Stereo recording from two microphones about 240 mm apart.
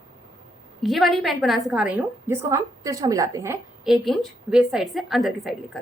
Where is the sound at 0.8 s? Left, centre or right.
Centre.